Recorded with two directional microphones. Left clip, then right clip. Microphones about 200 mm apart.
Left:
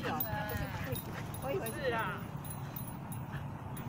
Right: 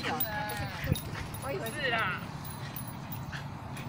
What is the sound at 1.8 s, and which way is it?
Speech, 50° left (ahead or behind).